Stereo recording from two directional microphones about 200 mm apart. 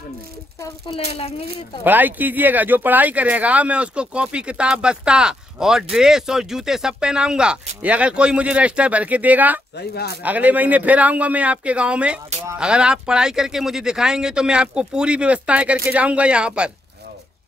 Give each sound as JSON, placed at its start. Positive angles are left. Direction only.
{"t": 0.6, "sound": "speech", "side_deg": 25}
{"t": 1.9, "sound": "speech", "side_deg": -10}
{"t": 9.8, "sound": "speech", "side_deg": 55}
{"t": 10.2, "sound": "speech", "side_deg": -10}